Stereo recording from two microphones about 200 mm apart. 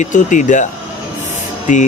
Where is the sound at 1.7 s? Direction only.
40° left (ahead or behind).